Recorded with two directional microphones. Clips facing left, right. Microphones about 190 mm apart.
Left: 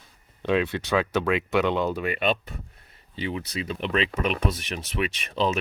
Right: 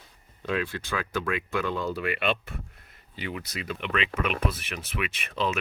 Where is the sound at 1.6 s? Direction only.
75° left (ahead or behind).